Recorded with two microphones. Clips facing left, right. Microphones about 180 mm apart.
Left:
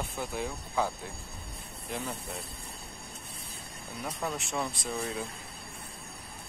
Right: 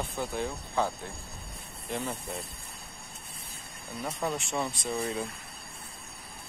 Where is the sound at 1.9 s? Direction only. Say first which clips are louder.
Right 3 dB; centre (ahead or behind).